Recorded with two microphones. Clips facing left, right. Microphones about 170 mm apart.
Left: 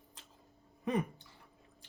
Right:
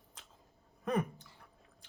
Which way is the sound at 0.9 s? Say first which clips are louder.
Even; 80° right.